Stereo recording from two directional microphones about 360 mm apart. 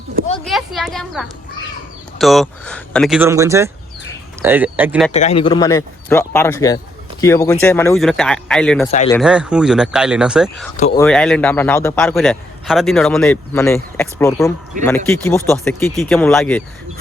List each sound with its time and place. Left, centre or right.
0.4 s a man's voice: centre
5.1 s a man's voice: centre
8.9 s speech: centre
9.1 s a man's voice: centre
10.8 s speech: centre
11.0 s a man's voice: centre